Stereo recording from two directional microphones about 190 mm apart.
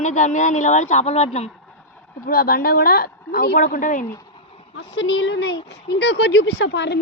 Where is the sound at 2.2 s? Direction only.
50° left (ahead or behind).